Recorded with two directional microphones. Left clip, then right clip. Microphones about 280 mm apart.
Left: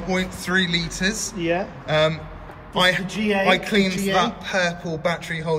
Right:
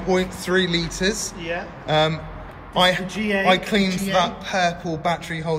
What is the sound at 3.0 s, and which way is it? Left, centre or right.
Speech, left.